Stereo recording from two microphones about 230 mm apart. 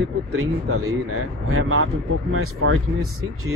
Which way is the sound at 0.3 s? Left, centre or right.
Right.